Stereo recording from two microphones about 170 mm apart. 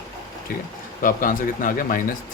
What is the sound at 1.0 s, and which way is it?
Speech, 55° left (ahead or behind).